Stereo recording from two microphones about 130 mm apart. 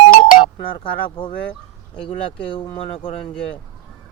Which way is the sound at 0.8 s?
40° left (ahead or behind).